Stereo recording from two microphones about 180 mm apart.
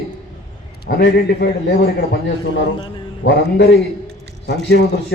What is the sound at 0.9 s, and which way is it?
Speech, 60° left (ahead or behind).